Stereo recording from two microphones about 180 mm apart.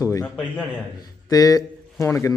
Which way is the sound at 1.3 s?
20° left (ahead or behind).